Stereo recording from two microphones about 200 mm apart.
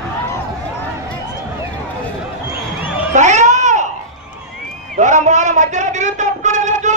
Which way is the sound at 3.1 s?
35° right (ahead or behind).